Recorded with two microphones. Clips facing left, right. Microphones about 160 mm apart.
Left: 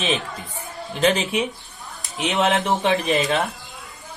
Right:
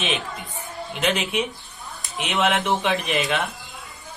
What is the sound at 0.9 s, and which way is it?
Speech, 35° left (ahead or behind).